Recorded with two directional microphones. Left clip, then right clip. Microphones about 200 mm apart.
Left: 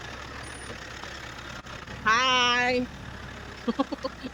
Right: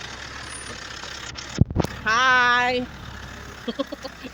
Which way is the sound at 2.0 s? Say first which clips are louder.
Right 4 dB; 10° left (ahead or behind).